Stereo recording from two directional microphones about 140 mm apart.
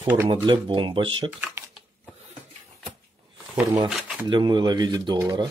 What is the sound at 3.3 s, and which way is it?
Shuffling cards, 10° right (ahead or behind).